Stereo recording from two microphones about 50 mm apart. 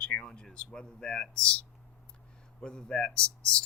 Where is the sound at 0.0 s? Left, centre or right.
Left.